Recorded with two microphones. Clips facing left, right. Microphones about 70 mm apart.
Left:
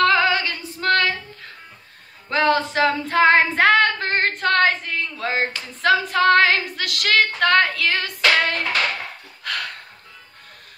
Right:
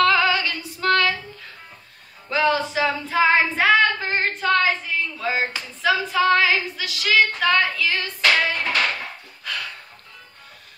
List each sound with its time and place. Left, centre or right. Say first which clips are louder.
0.0 s female singing: left 1 dB; left
2.2 s female singing: left 2 dB; left
9.4 s a sound: left 3 dB; left